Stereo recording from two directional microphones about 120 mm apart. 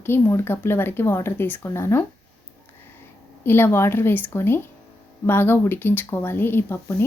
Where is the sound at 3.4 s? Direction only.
20° left (ahead or behind).